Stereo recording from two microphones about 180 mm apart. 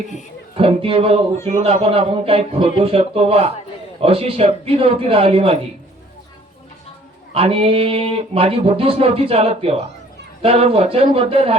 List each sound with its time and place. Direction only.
0.5 s speech: 30° right (ahead or behind)
7.3 s speech: 30° right (ahead or behind)